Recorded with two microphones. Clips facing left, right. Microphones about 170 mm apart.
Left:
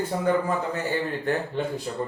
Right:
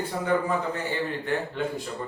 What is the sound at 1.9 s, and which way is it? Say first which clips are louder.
Speech: left 4 dB; 30° left (ahead or behind).